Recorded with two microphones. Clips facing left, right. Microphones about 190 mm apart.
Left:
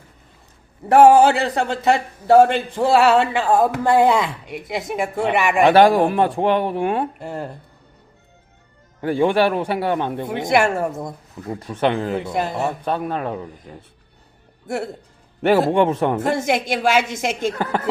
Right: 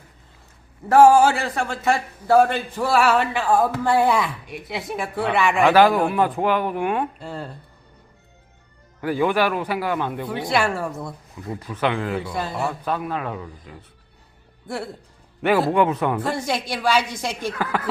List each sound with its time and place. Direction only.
1.4 s speech: 20° left (ahead or behind)
4.4 s a woman's voice: 55° left (ahead or behind)
4.9 s speech: 20° left (ahead or behind)
5.6 s speech: 35° left (ahead or behind)
7.2 s speech: 20° left (ahead or behind)
9.0 s speech: 30° left (ahead or behind)
12.1 s speech: 25° left (ahead or behind)
12.9 s speech: 35° left (ahead or behind)
15.5 s speech: 25° left (ahead or behind)